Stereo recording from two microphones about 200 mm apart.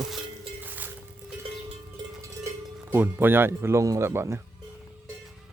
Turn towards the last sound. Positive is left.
turn(degrees=-10)  # may be behind; listen again after turning